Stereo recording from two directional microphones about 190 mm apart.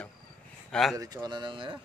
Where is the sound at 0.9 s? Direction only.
25° right (ahead or behind).